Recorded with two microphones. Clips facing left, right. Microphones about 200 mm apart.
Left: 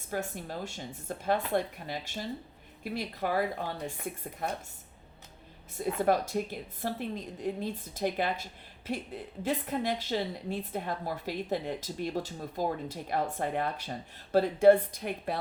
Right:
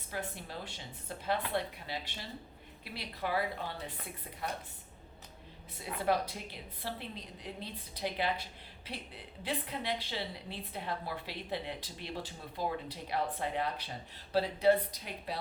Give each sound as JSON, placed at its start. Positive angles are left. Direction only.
{"t": 0.1, "sound": "a woman's voice", "side_deg": 45}
{"t": 5.7, "sound": "a woman's voice", "side_deg": 45}